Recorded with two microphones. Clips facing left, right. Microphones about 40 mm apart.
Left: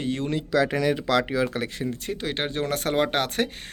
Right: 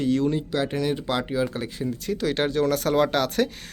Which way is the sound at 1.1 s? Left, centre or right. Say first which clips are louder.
Left 2 dB; left.